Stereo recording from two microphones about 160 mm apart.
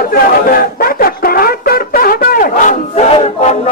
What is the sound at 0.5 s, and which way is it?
Music, 65° left (ahead or behind).